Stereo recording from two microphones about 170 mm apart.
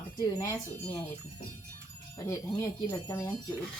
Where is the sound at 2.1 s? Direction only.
15° left (ahead or behind).